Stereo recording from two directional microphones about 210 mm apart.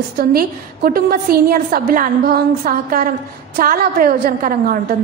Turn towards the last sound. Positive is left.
turn(degrees=-45)  # may be behind; listen again after turning